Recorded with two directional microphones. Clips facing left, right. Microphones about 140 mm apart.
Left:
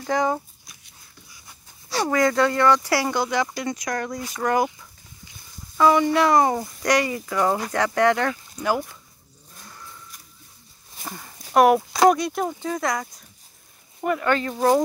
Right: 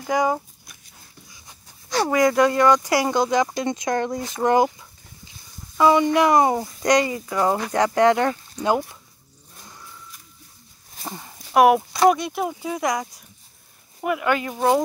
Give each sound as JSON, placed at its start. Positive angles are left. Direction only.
{"t": 0.0, "sound": "speech", "side_deg": -10}
{"t": 2.0, "sound": "speech", "side_deg": -15}
{"t": 5.8, "sound": "speech", "side_deg": -15}
{"t": 11.1, "sound": "horse", "side_deg": -20}
{"t": 11.5, "sound": "speech", "side_deg": -5}